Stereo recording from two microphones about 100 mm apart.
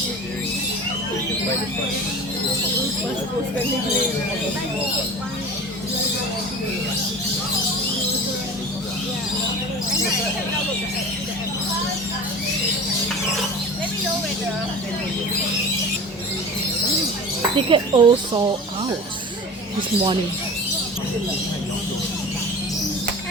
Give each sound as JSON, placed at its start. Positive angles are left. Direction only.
{"t": 17.7, "sound": "speech", "side_deg": -55}